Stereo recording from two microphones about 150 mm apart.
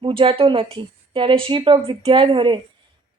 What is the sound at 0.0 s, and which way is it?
A woman's voice, 40° right (ahead or behind).